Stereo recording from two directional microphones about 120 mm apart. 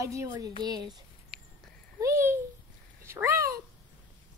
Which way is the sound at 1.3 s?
Centre (ahead or behind).